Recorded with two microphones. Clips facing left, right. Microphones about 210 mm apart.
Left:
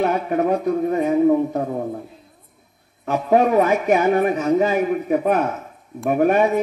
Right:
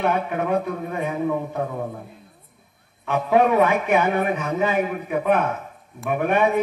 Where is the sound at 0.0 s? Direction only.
40° left (ahead or behind).